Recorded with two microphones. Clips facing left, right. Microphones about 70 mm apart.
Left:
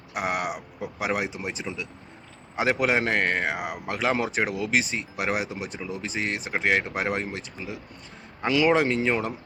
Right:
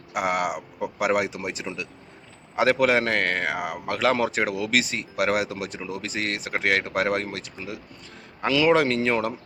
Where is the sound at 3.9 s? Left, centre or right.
Centre.